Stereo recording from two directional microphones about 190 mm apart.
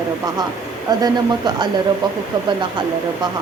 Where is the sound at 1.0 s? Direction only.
20° right (ahead or behind).